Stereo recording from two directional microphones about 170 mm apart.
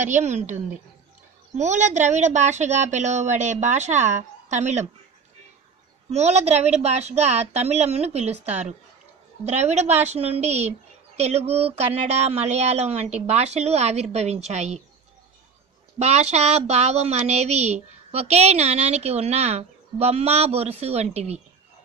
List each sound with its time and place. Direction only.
0.0 s speech: 45° right (ahead or behind)
1.6 s speech: 45° right (ahead or behind)
6.0 s a woman's voice: 40° right (ahead or behind)
16.0 s a woman's voice: 40° right (ahead or behind)